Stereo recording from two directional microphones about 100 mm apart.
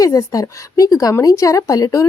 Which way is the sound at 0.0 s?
35° left (ahead or behind).